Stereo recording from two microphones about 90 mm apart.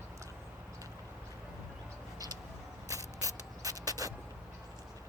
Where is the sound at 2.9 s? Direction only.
40° right (ahead or behind).